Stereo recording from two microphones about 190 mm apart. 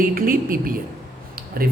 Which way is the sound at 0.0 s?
50° right (ahead or behind).